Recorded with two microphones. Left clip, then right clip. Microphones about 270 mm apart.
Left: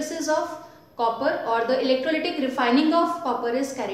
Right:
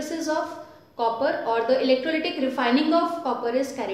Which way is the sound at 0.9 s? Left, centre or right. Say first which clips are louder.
Even; centre.